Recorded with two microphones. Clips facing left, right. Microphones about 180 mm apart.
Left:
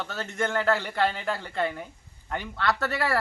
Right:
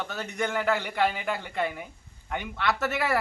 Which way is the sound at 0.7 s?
15° right (ahead or behind).